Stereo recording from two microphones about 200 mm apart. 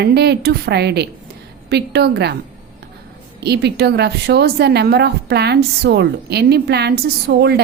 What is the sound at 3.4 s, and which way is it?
A woman's voice, 55° right (ahead or behind).